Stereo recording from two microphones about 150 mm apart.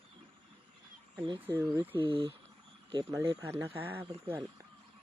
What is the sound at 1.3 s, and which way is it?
Speech, 15° right (ahead or behind).